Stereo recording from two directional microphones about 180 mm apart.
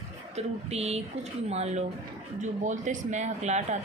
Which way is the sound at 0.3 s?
35° right (ahead or behind).